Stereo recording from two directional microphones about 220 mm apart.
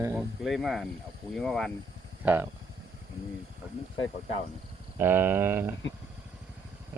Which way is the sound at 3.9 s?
20° left (ahead or behind).